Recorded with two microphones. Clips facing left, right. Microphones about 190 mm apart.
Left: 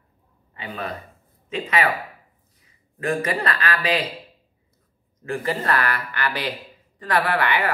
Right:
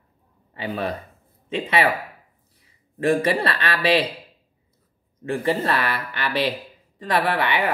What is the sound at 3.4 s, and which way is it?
Speech, 30° right (ahead or behind).